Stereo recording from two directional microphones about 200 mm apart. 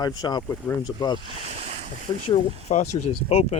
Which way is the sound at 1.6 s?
30° right (ahead or behind).